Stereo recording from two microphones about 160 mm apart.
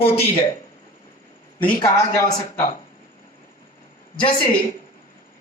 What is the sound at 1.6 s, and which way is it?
Speech, 25° left (ahead or behind).